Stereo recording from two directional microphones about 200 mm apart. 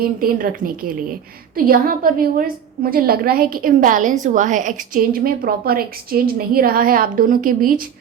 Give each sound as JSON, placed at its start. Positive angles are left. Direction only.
{"t": 0.0, "sound": "a woman's voice", "side_deg": -45}